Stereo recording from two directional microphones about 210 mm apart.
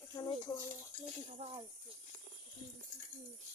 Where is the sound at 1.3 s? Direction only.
25° right (ahead or behind).